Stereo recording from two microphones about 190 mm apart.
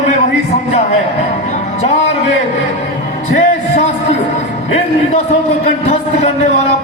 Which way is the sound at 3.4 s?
35° left (ahead or behind).